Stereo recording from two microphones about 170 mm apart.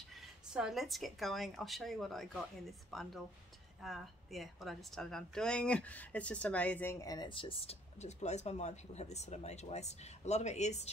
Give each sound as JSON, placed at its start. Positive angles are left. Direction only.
{"t": 0.5, "sound": "a woman's voice", "side_deg": -5}